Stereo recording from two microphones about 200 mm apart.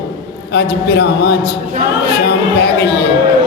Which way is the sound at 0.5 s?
55° left (ahead or behind).